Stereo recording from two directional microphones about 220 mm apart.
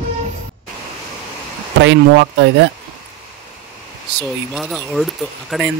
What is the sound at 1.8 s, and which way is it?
Speech, 55° right (ahead or behind).